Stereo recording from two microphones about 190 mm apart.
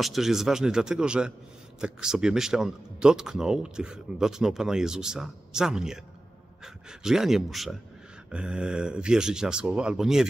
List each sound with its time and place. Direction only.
0.0 s speech: centre (ahead or behind)